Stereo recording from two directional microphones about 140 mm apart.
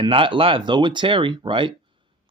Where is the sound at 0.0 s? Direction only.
40° right (ahead or behind).